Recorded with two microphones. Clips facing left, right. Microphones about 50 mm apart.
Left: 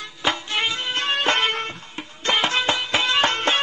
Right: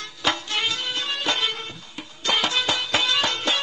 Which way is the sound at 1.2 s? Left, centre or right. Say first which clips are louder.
Left 4 dB; left.